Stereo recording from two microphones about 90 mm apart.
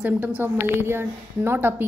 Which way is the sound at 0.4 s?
25° right (ahead or behind).